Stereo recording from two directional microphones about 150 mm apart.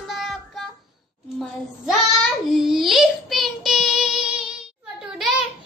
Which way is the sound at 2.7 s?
Centre (ahead or behind).